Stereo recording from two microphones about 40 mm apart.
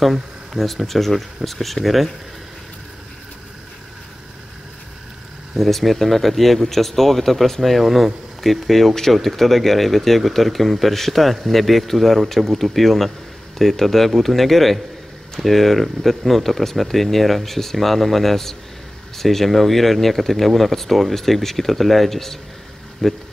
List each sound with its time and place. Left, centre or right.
0.0 s speech: centre
5.6 s speech: centre